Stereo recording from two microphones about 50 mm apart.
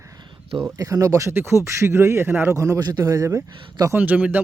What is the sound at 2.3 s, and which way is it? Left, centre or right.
Speech, right.